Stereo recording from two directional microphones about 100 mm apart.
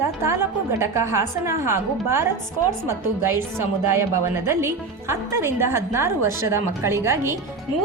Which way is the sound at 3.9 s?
25° right (ahead or behind).